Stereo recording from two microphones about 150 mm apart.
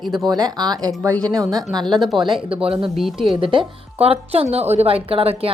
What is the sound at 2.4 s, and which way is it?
Speech, 40° right (ahead or behind).